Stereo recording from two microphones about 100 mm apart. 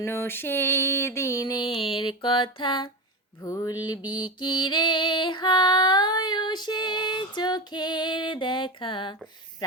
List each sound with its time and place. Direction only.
0.0 s mantra: 25° left (ahead or behind)
1.6 s music: 60° left (ahead or behind)
3.4 s mantra: 35° left (ahead or behind)
4.4 s female singing: 50° left (ahead or behind)